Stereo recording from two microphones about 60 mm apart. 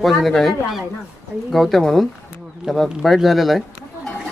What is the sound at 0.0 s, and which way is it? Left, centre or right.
Speech, centre.